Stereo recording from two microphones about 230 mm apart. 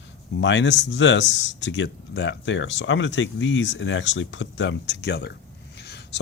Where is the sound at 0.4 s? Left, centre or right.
Left.